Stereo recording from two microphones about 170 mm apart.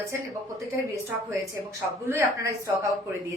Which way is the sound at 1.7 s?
15° right (ahead or behind).